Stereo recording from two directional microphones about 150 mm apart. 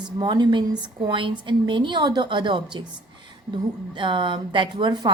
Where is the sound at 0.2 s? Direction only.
30° right (ahead or behind).